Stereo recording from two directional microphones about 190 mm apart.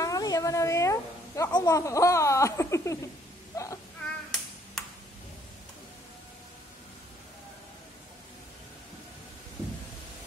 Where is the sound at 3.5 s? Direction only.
15° left (ahead or behind).